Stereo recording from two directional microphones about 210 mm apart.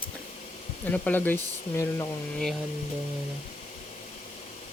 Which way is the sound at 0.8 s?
10° left (ahead or behind).